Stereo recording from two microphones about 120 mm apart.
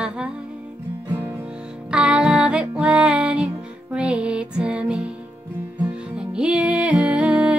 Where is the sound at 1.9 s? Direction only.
10° right (ahead or behind).